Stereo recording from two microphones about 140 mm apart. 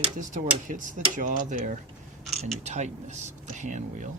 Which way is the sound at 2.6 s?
55° right (ahead or behind).